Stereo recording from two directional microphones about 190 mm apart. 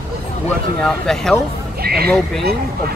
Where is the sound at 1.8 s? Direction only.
55° right (ahead or behind).